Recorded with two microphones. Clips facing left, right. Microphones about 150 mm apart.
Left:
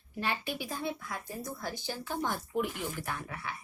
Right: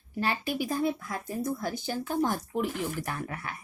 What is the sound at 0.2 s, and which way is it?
A woman's voice, 40° right (ahead or behind).